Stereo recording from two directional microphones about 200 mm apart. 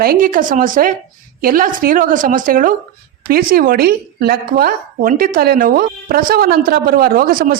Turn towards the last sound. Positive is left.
turn(degrees=-45)  # may be behind; listen again after turning